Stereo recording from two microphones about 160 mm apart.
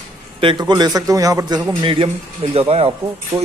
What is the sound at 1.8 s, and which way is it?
Speech, 35° right (ahead or behind).